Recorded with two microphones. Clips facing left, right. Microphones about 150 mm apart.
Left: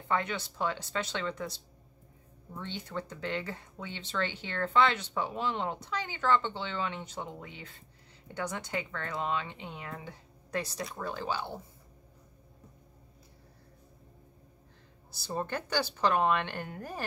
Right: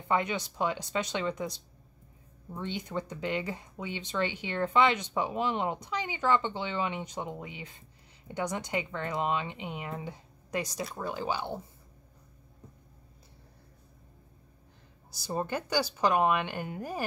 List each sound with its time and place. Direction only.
0.1 s speech: 15° right (ahead or behind)
15.0 s speech: 15° right (ahead or behind)